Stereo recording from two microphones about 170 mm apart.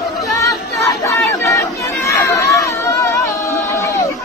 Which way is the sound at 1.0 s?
15° left (ahead or behind).